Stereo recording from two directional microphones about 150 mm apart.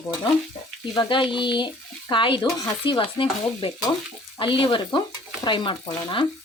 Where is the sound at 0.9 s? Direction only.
30° left (ahead or behind).